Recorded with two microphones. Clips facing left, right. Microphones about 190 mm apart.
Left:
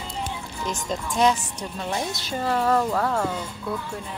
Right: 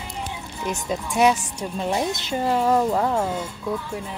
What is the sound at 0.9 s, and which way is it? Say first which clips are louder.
A woman's voice: right 2 dB; 10° right (ahead or behind).